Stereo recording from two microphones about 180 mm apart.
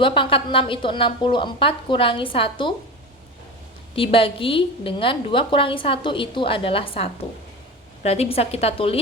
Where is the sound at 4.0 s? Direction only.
30° left (ahead or behind).